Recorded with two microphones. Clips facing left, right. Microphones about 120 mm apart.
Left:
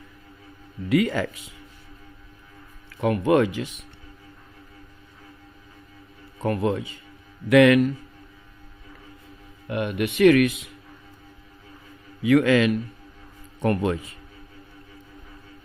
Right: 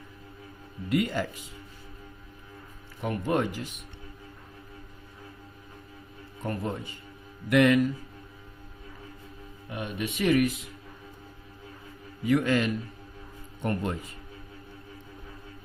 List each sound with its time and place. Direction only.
0.9 s speech: 90° left
3.0 s speech: 90° left
6.4 s speech: 85° left
9.6 s speech: 65° left (ahead or behind); by 10.6 s 85° left
12.2 s speech: 90° left